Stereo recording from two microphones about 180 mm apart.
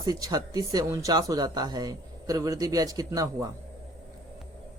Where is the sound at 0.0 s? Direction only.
20° right (ahead or behind).